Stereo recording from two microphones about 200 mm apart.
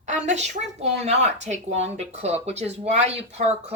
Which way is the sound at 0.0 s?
35° right (ahead or behind).